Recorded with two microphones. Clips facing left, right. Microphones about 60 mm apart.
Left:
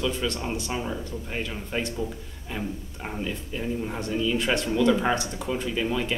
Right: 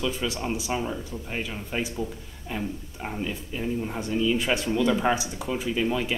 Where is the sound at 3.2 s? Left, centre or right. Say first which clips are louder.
Even; centre.